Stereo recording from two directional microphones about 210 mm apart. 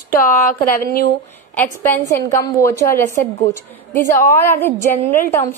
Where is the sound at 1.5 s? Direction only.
10° left (ahead or behind).